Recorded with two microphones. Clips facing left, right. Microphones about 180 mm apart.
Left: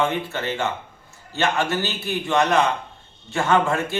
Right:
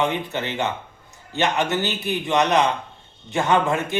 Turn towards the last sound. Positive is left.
turn(degrees=-20)  # may be behind; listen again after turning